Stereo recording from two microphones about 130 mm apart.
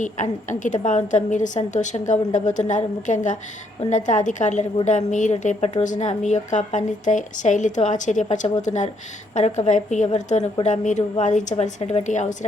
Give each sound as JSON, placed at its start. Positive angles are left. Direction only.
{"t": 0.0, "sound": "a woman's voice", "side_deg": 70}